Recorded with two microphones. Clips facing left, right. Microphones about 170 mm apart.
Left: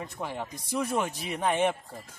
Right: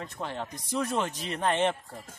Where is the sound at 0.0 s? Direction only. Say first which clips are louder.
Even; 10° left (ahead or behind).